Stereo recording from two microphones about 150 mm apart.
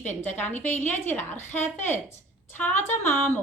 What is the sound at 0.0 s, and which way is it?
A woman's voice, 15° left (ahead or behind).